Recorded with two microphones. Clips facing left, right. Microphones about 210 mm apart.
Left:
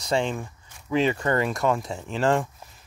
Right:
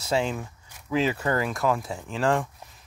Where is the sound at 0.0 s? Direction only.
5° right (ahead or behind).